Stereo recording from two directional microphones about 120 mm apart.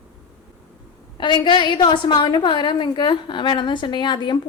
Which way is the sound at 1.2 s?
40° left (ahead or behind).